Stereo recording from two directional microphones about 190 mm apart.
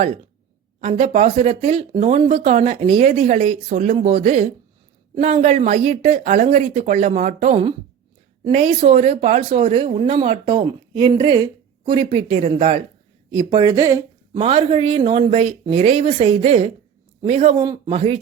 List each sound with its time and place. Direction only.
0.8 s speech: 35° right (ahead or behind)
13.3 s speech: 25° right (ahead or behind)
14.4 s speech: 30° right (ahead or behind)
17.8 s speech: 30° right (ahead or behind)